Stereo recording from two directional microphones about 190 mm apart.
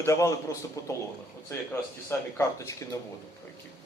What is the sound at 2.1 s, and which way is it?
Speech, 15° left (ahead or behind).